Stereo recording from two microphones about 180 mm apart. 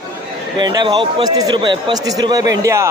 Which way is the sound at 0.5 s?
25° right (ahead or behind).